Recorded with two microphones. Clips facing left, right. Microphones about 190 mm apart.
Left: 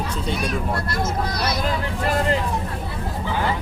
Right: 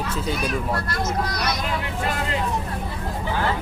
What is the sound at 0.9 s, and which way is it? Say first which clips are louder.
Speech: left 1 dB; 30° left (ahead or behind).